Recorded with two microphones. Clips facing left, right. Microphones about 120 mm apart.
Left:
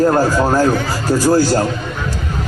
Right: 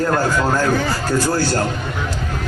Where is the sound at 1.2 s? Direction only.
5° left (ahead or behind).